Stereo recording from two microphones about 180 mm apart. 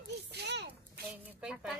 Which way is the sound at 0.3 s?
70° right (ahead or behind).